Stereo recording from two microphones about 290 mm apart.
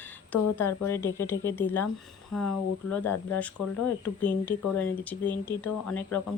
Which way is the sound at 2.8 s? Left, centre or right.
Left.